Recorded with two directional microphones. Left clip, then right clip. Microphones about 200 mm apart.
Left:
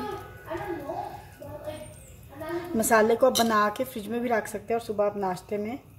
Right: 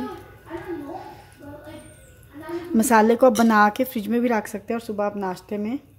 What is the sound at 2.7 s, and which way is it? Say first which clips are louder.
Speech: right 4 dB; 45° right (ahead or behind).